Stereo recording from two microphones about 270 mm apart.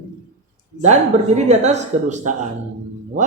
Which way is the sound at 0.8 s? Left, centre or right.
Right.